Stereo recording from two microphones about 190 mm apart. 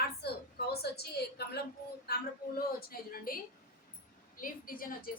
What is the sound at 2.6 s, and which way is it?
A woman's voice, 50° left (ahead or behind).